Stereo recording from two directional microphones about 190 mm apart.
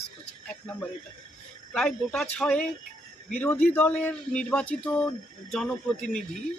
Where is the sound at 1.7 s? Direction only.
5° left (ahead or behind).